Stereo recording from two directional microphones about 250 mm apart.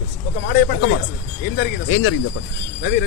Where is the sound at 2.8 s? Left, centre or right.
Left.